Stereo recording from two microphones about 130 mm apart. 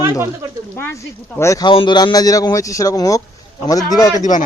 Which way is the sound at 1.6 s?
40° left (ahead or behind).